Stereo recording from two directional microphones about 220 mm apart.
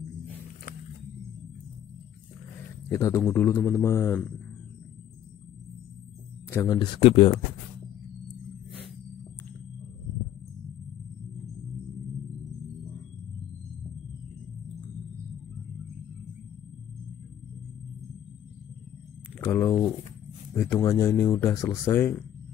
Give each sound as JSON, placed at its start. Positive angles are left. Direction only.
{"t": 2.9, "sound": "speech", "side_deg": 15}
{"t": 6.5, "sound": "speech", "side_deg": 15}
{"t": 19.4, "sound": "a sound", "side_deg": 10}
{"t": 20.5, "sound": "speech", "side_deg": 10}